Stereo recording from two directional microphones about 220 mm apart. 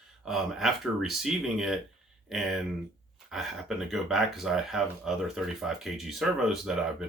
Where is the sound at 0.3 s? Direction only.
Centre (ahead or behind).